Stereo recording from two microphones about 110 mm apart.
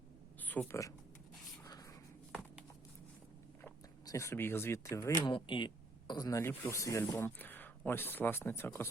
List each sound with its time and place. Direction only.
0.3 s a sound: 15° left (ahead or behind)
0.7 s speech: 30° left (ahead or behind)
4.0 s speech: 30° left (ahead or behind)
5.2 s speech: 45° left (ahead or behind)
6.4 s speech: 25° left (ahead or behind)